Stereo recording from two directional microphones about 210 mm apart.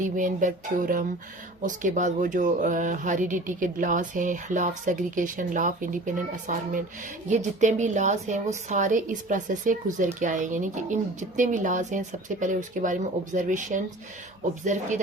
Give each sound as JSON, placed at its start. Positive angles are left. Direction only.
{"t": 0.0, "sound": "speech", "side_deg": -40}